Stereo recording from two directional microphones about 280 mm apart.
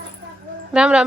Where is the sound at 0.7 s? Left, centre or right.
Centre.